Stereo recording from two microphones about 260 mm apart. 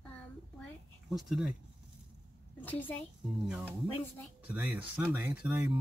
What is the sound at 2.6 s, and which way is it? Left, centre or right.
Speech, centre.